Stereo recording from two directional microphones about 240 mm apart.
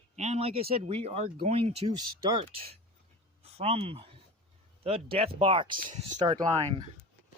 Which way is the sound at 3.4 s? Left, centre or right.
Right.